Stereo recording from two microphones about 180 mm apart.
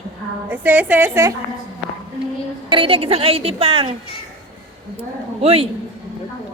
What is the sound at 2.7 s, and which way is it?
A woman's voice, 30° right (ahead or behind).